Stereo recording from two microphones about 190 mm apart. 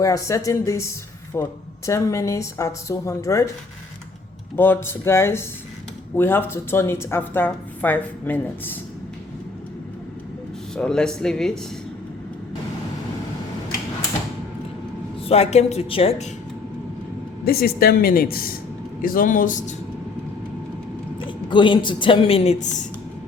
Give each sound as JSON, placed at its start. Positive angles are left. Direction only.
{"t": 0.0, "sound": "a woman's voice", "side_deg": 15}
{"t": 4.5, "sound": "a woman's voice", "side_deg": 10}
{"t": 10.8, "sound": "speech", "side_deg": 5}
{"t": 15.3, "sound": "a woman's voice", "side_deg": 35}
{"t": 17.4, "sound": "speech", "side_deg": 55}
{"t": 21.2, "sound": "a woman's voice", "side_deg": 25}